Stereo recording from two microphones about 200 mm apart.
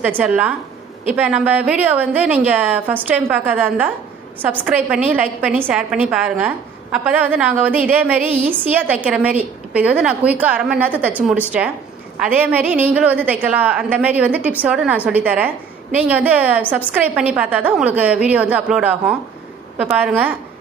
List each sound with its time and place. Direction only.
0.0 s a woman's voice: 5° right (ahead or behind)